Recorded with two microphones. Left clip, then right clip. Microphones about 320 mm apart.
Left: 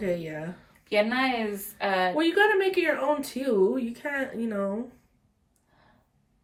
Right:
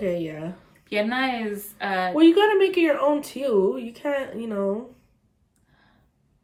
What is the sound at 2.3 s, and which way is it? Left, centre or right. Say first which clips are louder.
Speech: right 3 dB; centre.